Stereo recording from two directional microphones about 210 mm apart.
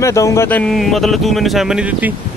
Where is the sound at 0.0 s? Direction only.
15° left (ahead or behind).